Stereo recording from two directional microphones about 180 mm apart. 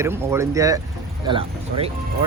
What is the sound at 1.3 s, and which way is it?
Speech, 30° right (ahead or behind).